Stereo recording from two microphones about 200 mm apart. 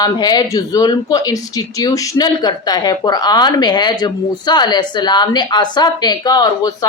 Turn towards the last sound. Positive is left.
turn(degrees=20)  # may be behind; listen again after turning